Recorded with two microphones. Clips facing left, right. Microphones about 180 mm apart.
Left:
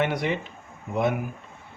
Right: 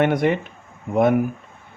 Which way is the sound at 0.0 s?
50° right (ahead or behind).